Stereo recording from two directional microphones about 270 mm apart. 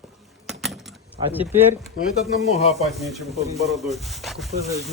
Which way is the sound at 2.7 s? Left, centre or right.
Centre.